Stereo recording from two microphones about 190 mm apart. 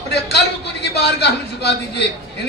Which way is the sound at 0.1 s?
60° left (ahead or behind).